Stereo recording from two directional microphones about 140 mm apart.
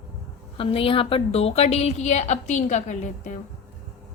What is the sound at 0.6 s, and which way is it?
A woman's voice, 40° left (ahead or behind).